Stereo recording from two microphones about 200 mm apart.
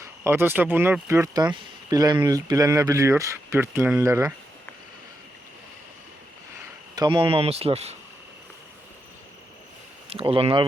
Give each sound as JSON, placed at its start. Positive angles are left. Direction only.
{"t": 0.3, "sound": "speech", "side_deg": -10}
{"t": 6.9, "sound": "speech", "side_deg": -20}
{"t": 10.1, "sound": "speech", "side_deg": -30}